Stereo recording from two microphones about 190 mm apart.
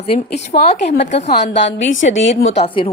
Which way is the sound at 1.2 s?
60° left (ahead or behind).